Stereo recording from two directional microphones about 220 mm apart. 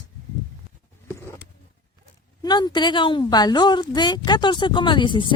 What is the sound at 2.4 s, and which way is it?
Speech, 20° left (ahead or behind).